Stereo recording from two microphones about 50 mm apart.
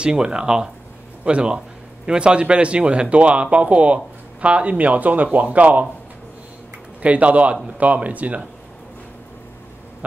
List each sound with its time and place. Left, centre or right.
0.0 s speech: centre
7.0 s speech: right